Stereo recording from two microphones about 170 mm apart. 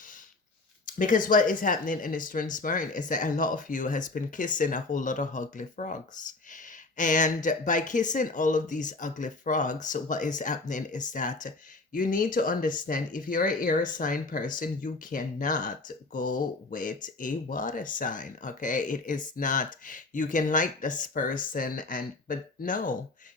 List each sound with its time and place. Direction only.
0.9 s speech: 50° left (ahead or behind)